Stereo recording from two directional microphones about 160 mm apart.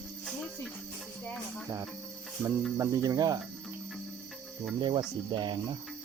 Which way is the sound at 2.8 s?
20° right (ahead or behind).